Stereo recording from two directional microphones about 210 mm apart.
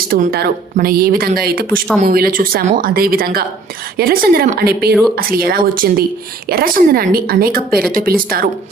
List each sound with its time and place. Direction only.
0.1 s speech: 45° right (ahead or behind)